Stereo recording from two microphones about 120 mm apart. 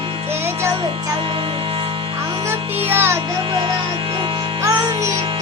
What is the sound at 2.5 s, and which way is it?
Music, 20° right (ahead or behind).